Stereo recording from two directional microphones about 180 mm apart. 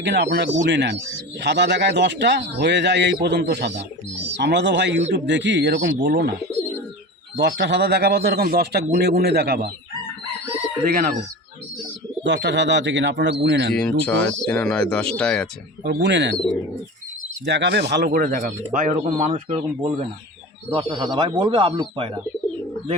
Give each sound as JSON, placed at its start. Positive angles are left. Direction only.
{"t": 0.0, "sound": "a man's voice", "side_deg": -75}
{"t": 7.3, "sound": "speech", "side_deg": -70}
{"t": 12.2, "sound": "speech", "side_deg": -75}
{"t": 13.4, "sound": "a man's voice", "side_deg": -65}
{"t": 13.7, "sound": "speech", "side_deg": 5}
{"t": 15.8, "sound": "a man's voice", "side_deg": -75}
{"t": 17.4, "sound": "speech", "side_deg": -70}